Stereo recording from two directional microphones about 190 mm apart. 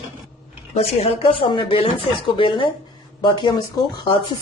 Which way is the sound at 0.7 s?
35° left (ahead or behind).